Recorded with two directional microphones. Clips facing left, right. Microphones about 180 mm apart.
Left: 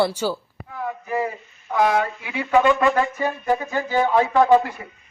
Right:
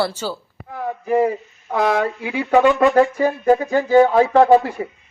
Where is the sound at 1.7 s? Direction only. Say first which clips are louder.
Right 1 dB; 40° right (ahead or behind).